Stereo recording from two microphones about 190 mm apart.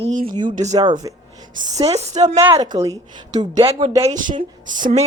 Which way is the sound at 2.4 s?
15° right (ahead or behind).